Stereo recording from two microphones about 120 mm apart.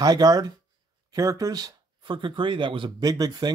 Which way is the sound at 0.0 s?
30° right (ahead or behind).